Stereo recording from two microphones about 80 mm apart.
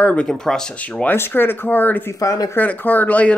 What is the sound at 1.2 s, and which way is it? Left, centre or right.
Speech, left.